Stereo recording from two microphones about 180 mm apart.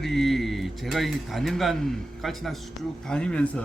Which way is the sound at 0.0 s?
Centre (ahead or behind).